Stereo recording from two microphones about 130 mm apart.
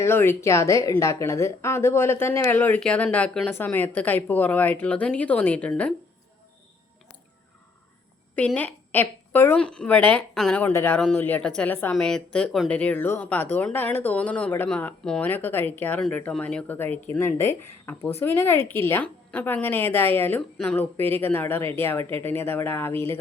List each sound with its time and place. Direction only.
0.0 s speech: 15° left (ahead or behind)
8.5 s speech: 15° left (ahead or behind)
10.6 s speech: 15° left (ahead or behind)